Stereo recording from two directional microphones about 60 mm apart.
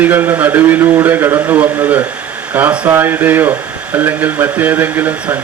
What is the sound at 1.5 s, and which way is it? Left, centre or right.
A man's voice, right.